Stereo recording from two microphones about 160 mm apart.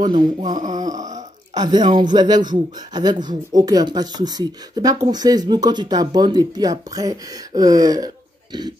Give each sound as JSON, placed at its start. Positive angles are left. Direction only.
{"t": 0.6, "sound": "a sound", "side_deg": -50}
{"t": 0.9, "sound": "burping", "side_deg": -50}
{"t": 1.5, "sound": "speech", "side_deg": -25}